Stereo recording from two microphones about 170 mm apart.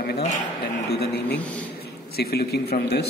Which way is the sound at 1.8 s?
65° left (ahead or behind).